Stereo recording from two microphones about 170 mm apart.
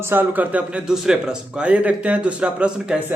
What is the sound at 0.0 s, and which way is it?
A man's voice, 10° right (ahead or behind).